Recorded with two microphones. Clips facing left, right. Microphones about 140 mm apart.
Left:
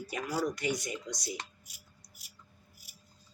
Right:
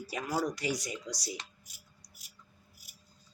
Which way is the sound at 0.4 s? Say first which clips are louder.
Left 1 dB; 35° right (ahead or behind).